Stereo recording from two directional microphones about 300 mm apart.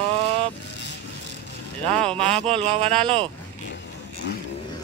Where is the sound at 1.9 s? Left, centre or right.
Centre.